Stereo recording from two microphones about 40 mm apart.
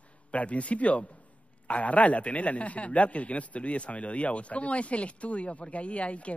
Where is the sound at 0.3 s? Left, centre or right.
Left.